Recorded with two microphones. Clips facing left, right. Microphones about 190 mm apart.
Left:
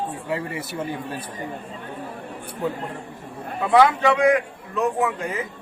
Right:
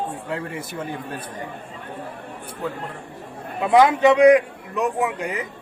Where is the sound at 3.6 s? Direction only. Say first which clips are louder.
Right 2 dB; 20° right (ahead or behind).